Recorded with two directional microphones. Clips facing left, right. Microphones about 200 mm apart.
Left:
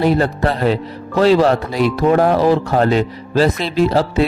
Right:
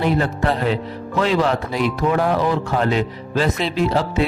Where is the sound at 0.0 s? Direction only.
40° left (ahead or behind).